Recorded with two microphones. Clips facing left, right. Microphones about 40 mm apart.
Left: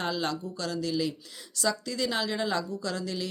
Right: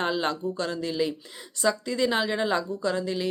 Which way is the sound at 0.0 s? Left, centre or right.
Right.